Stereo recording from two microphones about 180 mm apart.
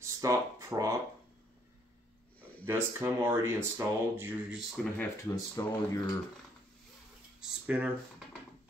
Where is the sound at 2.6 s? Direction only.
15° right (ahead or behind).